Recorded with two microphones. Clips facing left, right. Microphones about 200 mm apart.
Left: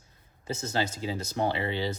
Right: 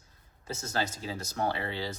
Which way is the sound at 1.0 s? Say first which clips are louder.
Left 3 dB; 20° left (ahead or behind).